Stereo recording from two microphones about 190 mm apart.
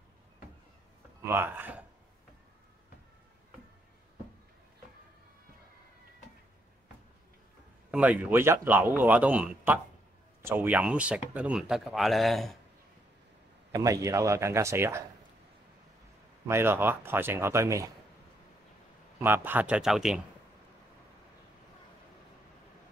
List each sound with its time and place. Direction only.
1.2 s speech: 10° right (ahead or behind)
7.9 s speech: 5° right (ahead or behind)
13.7 s speech: 15° right (ahead or behind)
16.4 s speech: 10° right (ahead or behind)
19.1 s speech: 10° right (ahead or behind)